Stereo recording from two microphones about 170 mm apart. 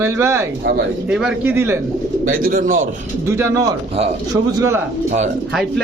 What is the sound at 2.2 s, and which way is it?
Speech, 55° right (ahead or behind).